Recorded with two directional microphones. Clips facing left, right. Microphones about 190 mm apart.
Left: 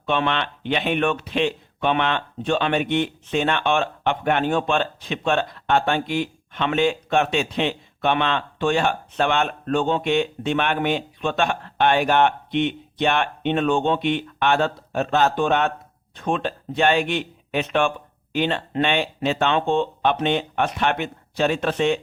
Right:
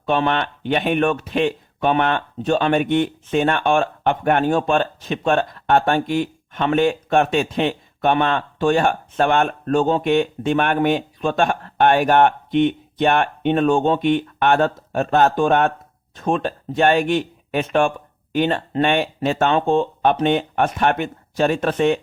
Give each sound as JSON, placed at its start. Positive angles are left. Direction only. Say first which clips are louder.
{"t": 0.0, "sound": "speech", "louder": "right 3 dB", "side_deg": -40}